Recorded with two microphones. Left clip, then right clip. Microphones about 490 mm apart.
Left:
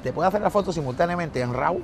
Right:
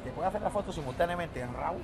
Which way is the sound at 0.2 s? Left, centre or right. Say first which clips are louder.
Left 10 dB; left.